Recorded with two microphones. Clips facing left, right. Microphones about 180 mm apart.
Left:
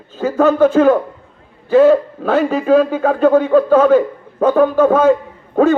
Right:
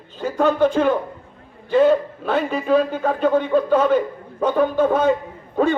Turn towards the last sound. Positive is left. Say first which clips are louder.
# left 6 dB
turn(degrees=45)  # may be behind; listen again after turning